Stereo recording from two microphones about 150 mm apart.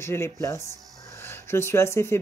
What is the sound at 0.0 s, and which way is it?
Speech, 15° left (ahead or behind).